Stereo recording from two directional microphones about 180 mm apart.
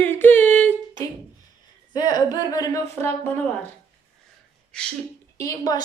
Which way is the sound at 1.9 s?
25° left (ahead or behind).